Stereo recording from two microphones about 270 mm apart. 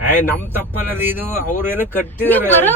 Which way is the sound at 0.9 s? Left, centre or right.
Centre.